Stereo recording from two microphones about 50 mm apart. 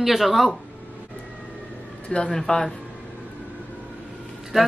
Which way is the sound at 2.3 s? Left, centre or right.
Centre.